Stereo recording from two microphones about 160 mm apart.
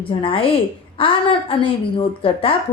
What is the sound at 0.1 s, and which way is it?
A woman's voice, 35° left (ahead or behind).